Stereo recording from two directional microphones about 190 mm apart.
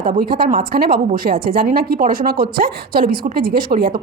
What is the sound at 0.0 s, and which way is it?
A woman's voice, 45° right (ahead or behind).